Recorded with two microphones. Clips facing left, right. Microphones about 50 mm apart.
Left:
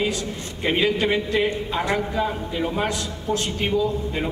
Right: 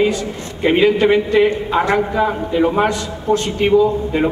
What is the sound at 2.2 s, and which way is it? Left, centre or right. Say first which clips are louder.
A man's voice: right 8 dB; centre.